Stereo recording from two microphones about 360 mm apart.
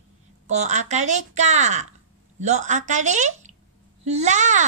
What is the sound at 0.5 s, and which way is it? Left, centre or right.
A woman's voice, centre.